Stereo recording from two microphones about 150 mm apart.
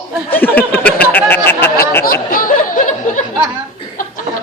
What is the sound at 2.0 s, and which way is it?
Chatter, 75° left (ahead or behind).